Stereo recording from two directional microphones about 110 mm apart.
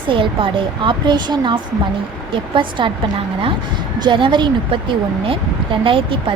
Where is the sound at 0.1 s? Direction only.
50° right (ahead or behind).